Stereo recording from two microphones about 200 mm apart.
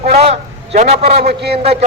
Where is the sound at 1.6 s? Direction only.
30° right (ahead or behind).